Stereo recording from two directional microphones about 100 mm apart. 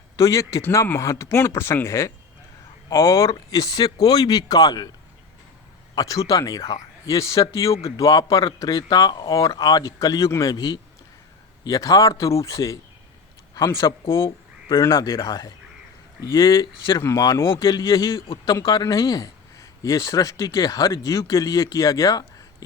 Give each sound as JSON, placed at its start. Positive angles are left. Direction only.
{"t": 0.2, "sound": "a man's voice", "side_deg": 30}
{"t": 5.9, "sound": "a man's voice", "side_deg": 35}
{"t": 13.8, "sound": "speech", "side_deg": 60}
{"t": 14.8, "sound": "a man's voice", "side_deg": 40}
{"t": 17.0, "sound": "speech", "side_deg": 30}
{"t": 17.5, "sound": "a man's voice", "side_deg": 50}